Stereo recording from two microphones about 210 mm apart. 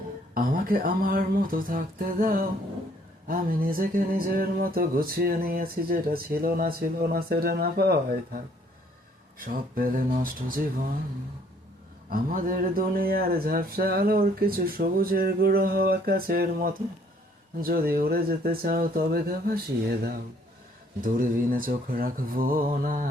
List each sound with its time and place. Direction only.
0.3 s speech: 40° right (ahead or behind)
9.4 s speech: 40° right (ahead or behind)
12.0 s speech: 40° right (ahead or behind)